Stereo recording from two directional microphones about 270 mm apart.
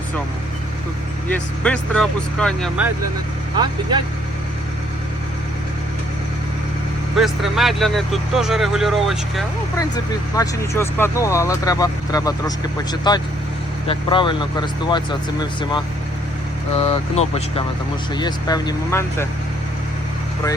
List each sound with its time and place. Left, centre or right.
1.6 s speech: centre
3.6 s speech: centre
7.2 s speech: centre
9.9 s speech: centre